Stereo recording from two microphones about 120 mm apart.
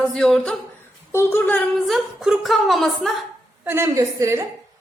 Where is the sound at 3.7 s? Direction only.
25° right (ahead or behind).